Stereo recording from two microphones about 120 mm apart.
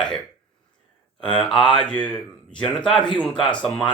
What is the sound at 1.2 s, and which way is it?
Speech, 5° left (ahead or behind).